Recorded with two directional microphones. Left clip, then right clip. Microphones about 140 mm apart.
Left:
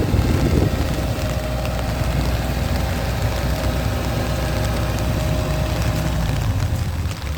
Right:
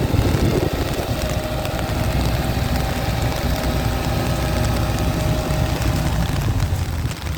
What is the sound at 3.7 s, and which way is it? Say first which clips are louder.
Vehicle: right 1 dB; 35° left (ahead or behind).